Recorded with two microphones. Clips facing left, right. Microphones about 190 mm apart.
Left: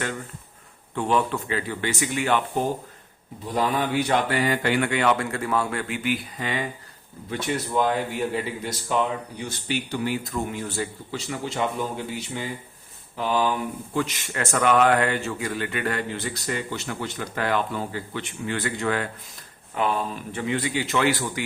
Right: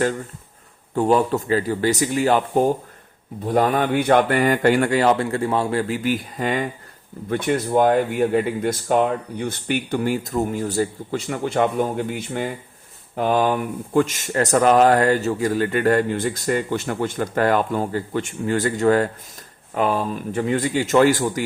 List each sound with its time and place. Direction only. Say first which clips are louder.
0.9 s a man's voice: right 6 dB; 40° right (ahead or behind)
3.4 s speech: right 6 dB; 55° right (ahead or behind)